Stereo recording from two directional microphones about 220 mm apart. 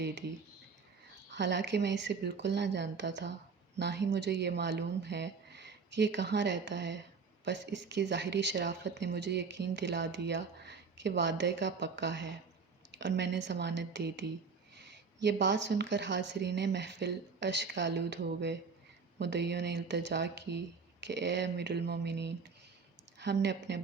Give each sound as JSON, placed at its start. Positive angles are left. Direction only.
{"t": 0.0, "sound": "speech", "side_deg": -50}
{"t": 1.3, "sound": "speech", "side_deg": -55}